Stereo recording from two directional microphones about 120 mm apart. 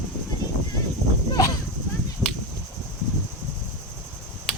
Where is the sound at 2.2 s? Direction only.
10° left (ahead or behind).